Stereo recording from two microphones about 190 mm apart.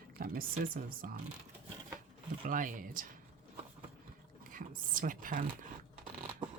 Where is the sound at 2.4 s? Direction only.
45° right (ahead or behind).